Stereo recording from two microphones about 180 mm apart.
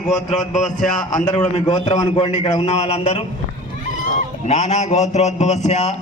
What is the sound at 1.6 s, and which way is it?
A man's voice, 20° left (ahead or behind).